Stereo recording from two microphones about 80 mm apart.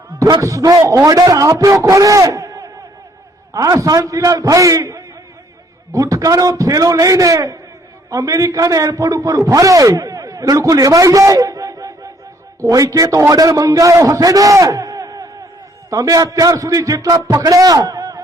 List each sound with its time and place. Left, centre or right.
0.4 s a man's voice: right